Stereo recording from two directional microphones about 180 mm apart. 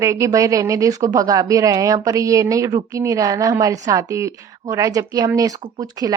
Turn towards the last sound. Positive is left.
turn(degrees=-20)  # may be behind; listen again after turning